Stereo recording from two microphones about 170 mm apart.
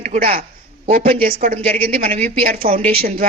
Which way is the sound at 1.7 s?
10° left (ahead or behind).